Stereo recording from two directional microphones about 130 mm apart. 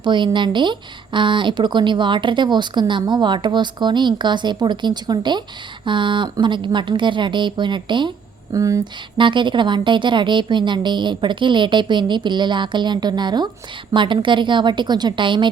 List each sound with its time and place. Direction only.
0.0 s speech: 35° right (ahead or behind)
8.5 s speech: 25° right (ahead or behind)
9.1 s speech: 40° right (ahead or behind)